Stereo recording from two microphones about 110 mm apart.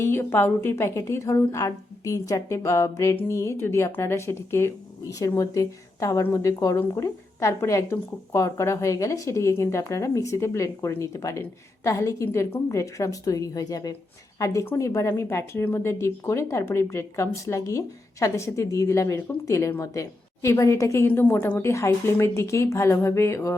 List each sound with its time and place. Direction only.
0.0 s speech: 20° left (ahead or behind)